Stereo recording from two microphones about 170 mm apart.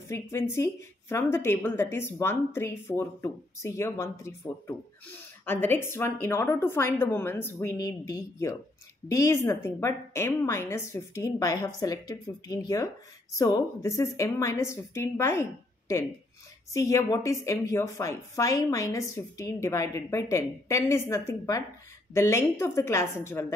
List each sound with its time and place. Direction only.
0.1 s a woman's voice: 15° left (ahead or behind)
16.7 s a woman's voice: 20° left (ahead or behind)